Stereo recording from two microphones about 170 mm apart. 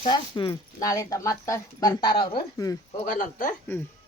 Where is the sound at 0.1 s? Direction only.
25° left (ahead or behind).